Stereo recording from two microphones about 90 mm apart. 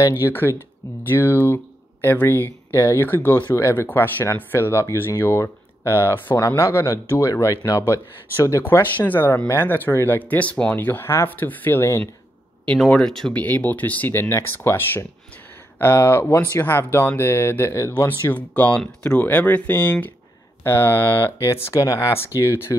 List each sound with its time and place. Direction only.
0.0 s speech: 25° left (ahead or behind)
8.7 s speech: 35° left (ahead or behind)
9.0 s speech: 20° left (ahead or behind)
12.6 s speech: 10° left (ahead or behind)
13.3 s speech: 15° left (ahead or behind)
17.9 s speech: 20° left (ahead or behind)
20.6 s speech: 30° left (ahead or behind)
21.6 s speech: 40° left (ahead or behind)